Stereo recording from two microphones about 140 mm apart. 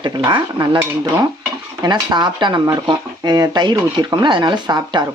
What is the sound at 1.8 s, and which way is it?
Speech, 30° right (ahead or behind).